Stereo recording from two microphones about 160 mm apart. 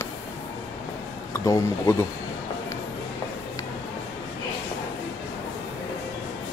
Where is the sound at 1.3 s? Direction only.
20° left (ahead or behind).